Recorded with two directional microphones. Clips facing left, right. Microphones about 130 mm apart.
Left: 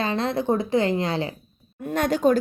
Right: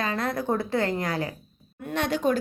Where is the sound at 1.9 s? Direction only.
45° left (ahead or behind).